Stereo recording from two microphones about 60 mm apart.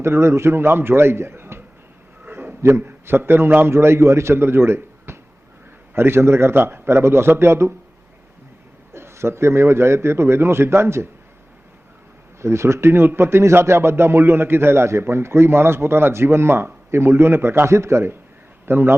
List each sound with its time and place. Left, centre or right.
0.0 s a man's voice: right
2.2 s a sound: right
2.8 s a man's voice: right
8.9 s a man's voice: right
12.4 s a man's voice: right
18.6 s a man's voice: right